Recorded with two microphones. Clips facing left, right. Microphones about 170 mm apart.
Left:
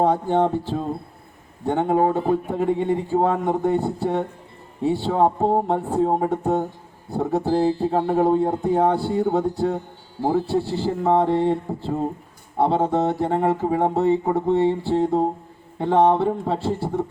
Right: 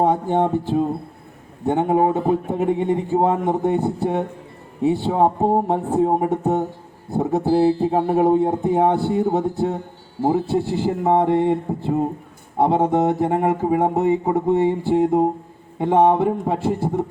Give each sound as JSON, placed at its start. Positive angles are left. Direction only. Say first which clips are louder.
{"t": 0.0, "sound": "speech", "louder": "right 1 dB", "side_deg": -15}